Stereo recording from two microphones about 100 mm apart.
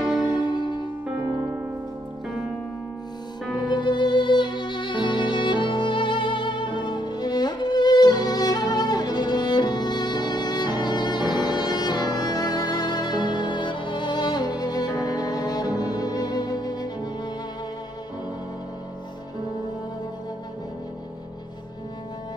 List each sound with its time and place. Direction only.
0.0 s music: centre (ahead or behind)
0.3 s music: 45° left (ahead or behind)
3.6 s music: 50° left (ahead or behind)